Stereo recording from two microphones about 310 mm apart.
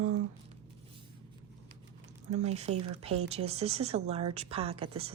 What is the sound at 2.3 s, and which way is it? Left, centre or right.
Speech, right.